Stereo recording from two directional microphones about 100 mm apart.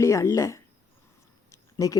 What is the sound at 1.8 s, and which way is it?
Speech, 35° left (ahead or behind).